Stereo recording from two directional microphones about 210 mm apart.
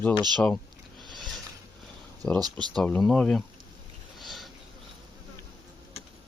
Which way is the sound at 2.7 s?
5° left (ahead or behind).